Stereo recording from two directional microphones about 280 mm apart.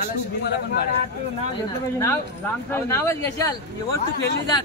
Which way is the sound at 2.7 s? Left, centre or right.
Centre.